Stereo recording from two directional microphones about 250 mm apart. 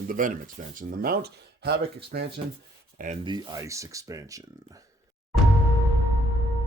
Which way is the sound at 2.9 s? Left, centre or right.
Right.